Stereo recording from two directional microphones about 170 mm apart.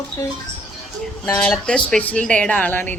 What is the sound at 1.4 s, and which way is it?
Speech, 5° left (ahead or behind).